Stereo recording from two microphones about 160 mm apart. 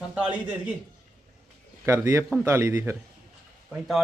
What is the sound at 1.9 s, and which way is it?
A man's voice, 15° right (ahead or behind).